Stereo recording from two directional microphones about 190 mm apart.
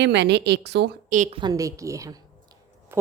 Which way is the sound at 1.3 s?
20° right (ahead or behind).